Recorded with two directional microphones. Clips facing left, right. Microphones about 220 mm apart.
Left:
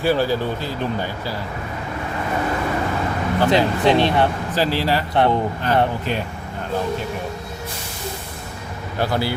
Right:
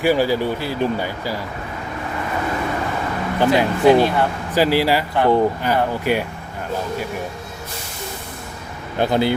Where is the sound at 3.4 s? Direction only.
25° left (ahead or behind).